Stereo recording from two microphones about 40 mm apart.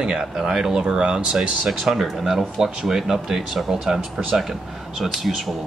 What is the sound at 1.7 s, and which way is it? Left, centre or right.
Speech, centre.